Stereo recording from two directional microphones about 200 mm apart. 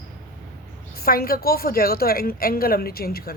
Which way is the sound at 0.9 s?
50° left (ahead or behind).